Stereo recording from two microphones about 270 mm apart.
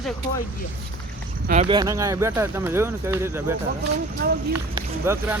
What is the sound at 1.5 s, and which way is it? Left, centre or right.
Speech, right.